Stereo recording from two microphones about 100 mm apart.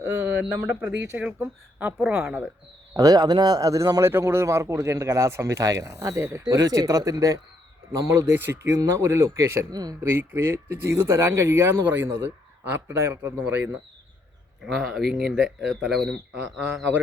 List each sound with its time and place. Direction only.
0.0 s a sound: 25° right (ahead or behind)
0.7 s speech: 15° right (ahead or behind)
2.9 s a man's voice: 40° right (ahead or behind)
4.0 s a man's voice: 25° right (ahead or behind)
10.0 s speech: 25° right (ahead or behind)
14.6 s speech: 5° right (ahead or behind)